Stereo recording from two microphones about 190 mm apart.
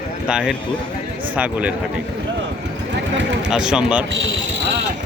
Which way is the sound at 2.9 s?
70° right (ahead or behind).